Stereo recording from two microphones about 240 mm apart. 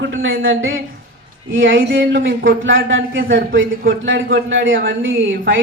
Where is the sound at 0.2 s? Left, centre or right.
Right.